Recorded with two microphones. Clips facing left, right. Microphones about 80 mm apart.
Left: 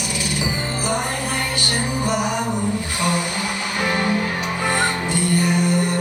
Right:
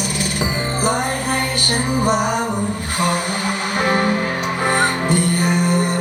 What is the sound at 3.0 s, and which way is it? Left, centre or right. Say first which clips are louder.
Music: right 4 dB; right.